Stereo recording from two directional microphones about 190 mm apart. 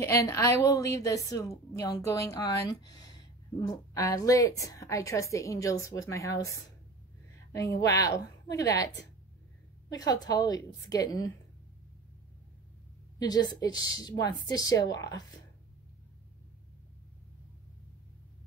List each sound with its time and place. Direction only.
0.0 s a woman's voice: 15° left (ahead or behind)
13.2 s a woman's voice: 20° left (ahead or behind)